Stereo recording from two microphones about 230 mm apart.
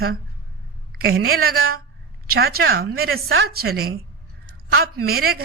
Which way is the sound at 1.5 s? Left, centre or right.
Right.